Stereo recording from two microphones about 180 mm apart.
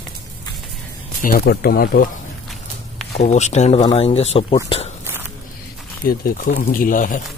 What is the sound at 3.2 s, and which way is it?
Speech, 40° left (ahead or behind).